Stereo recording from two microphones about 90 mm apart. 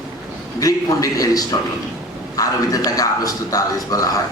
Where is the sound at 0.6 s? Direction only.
40° left (ahead or behind).